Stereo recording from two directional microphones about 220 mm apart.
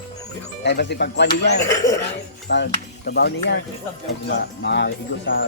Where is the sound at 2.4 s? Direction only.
50° left (ahead or behind).